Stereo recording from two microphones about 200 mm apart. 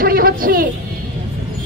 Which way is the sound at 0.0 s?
50° right (ahead or behind).